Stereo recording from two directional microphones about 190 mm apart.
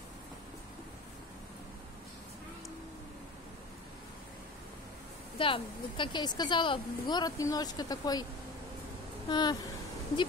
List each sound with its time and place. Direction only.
5.4 s a woman's voice: 25° left (ahead or behind)
9.3 s a woman's voice: 20° left (ahead or behind)